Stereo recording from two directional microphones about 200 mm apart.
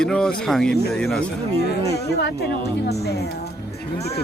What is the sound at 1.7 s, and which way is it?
Speech, 55° left (ahead or behind).